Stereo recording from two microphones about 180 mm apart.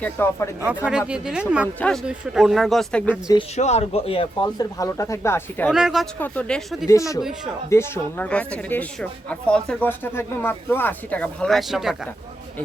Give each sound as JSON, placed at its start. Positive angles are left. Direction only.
{"t": 0.0, "sound": "a woman's voice", "side_deg": 15}
{"t": 0.9, "sound": "speech", "side_deg": -5}
{"t": 3.5, "sound": "speech", "side_deg": 35}
{"t": 5.7, "sound": "speech", "side_deg": -5}
{"t": 6.1, "sound": "a woman's voice", "side_deg": 10}
{"t": 6.8, "sound": "a woman's voice", "side_deg": 15}
{"t": 7.2, "sound": "speech", "side_deg": 0}
{"t": 7.7, "sound": "a woman's voice", "side_deg": 15}